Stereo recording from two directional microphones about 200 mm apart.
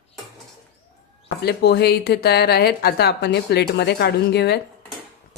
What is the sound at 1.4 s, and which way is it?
Speech, 55° left (ahead or behind).